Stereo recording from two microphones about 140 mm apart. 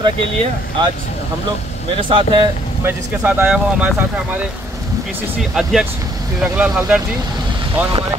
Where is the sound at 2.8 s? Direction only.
15° right (ahead or behind).